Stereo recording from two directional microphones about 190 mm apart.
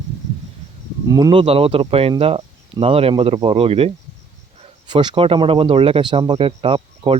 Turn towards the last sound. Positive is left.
turn(degrees=-25)  # may be behind; listen again after turning